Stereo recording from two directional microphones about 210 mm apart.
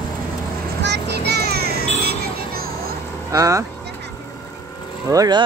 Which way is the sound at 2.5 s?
45° right (ahead or behind).